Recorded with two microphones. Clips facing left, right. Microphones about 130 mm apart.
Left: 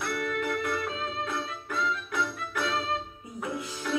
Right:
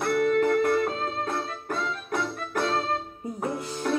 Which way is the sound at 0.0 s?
45° right (ahead or behind).